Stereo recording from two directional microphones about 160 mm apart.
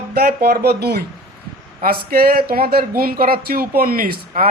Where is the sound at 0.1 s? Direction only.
75° right (ahead or behind).